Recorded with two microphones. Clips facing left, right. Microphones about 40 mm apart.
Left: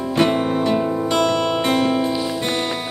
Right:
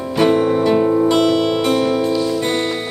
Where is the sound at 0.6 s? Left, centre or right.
Centre.